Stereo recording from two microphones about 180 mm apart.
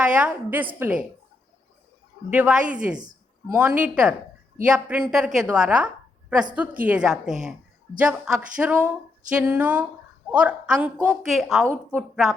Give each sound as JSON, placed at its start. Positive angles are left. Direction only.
{"t": 0.0, "sound": "a woman's voice", "side_deg": -5}
{"t": 2.3, "sound": "a woman's voice", "side_deg": -5}
{"t": 2.9, "sound": "a sound", "side_deg": -20}
{"t": 3.7, "sound": "a woman's voice", "side_deg": -5}
{"t": 11.6, "sound": "speech", "side_deg": -15}